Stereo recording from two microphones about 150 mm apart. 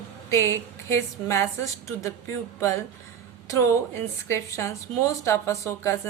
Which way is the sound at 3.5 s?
20° left (ahead or behind).